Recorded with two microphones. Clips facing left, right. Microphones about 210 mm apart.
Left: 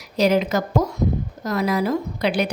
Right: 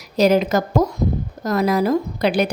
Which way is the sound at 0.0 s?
45° right (ahead or behind).